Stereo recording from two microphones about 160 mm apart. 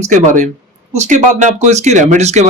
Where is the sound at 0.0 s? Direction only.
45° right (ahead or behind).